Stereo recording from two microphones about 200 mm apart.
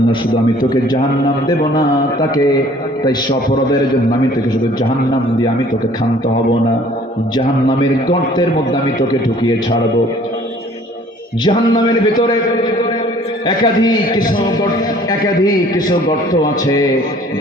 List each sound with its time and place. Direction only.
0.6 s a man's voice: 20° left (ahead or behind)
3.0 s a man's voice: 20° left (ahead or behind)
7.3 s a man's voice: 20° left (ahead or behind)
11.4 s a man's voice: 20° left (ahead or behind)
13.6 s a man's voice: 20° left (ahead or behind)